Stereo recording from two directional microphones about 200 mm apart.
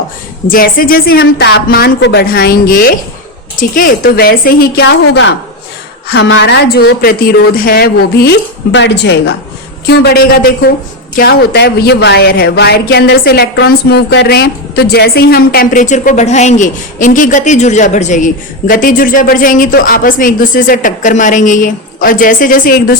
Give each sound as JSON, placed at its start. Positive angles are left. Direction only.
{"t": 0.4, "sound": "a woman's voice", "side_deg": 45}
{"t": 1.2, "sound": "a woman's voice", "side_deg": 60}